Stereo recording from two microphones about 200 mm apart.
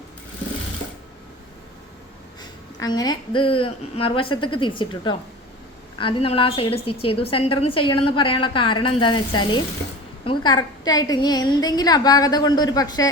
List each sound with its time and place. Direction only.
2.4 s a woman's voice: 20° left (ahead or behind)